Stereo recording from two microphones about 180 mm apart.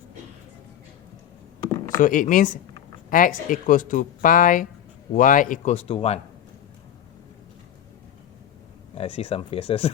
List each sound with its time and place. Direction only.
2.0 s speech: 45° left (ahead or behind)
9.0 s speech: 30° left (ahead or behind)